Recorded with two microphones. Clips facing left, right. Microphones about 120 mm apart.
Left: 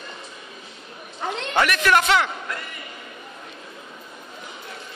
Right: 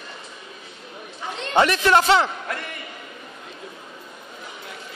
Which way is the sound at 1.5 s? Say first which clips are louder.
Right 3 dB; 30° right (ahead or behind).